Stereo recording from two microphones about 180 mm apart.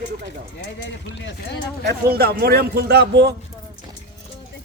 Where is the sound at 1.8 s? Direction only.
55° right (ahead or behind).